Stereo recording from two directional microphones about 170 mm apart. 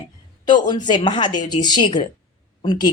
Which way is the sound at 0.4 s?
25° left (ahead or behind).